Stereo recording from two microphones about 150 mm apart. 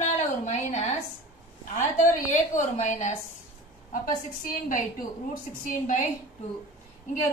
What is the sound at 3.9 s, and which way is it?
A woman's voice, 60° left (ahead or behind).